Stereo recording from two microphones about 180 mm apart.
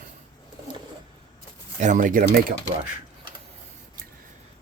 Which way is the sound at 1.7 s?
45° right (ahead or behind).